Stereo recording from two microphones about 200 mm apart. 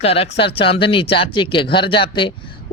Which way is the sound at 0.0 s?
30° left (ahead or behind).